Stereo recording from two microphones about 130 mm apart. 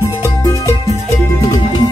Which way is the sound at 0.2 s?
25° left (ahead or behind).